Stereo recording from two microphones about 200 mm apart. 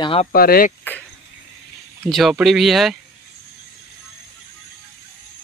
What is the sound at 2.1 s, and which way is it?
Speech, centre (ahead or behind).